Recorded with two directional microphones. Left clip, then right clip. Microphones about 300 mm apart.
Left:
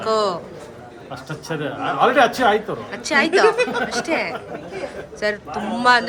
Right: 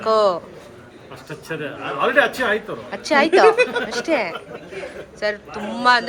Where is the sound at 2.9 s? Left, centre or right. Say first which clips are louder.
Right 2 dB; centre.